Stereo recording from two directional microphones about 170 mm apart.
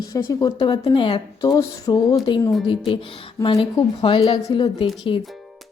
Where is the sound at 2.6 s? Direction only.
30° left (ahead or behind).